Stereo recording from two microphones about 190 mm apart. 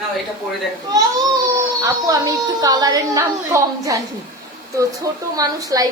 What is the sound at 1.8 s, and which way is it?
Speech, 20° right (ahead or behind).